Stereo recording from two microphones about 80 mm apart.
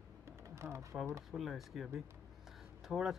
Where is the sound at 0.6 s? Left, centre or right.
Right.